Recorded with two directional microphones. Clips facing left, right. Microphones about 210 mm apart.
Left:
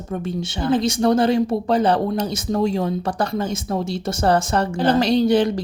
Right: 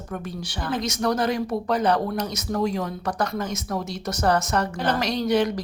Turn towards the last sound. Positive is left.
turn(degrees=30)  # may be behind; listen again after turning